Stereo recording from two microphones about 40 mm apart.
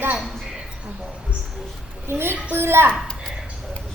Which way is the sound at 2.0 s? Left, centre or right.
Right.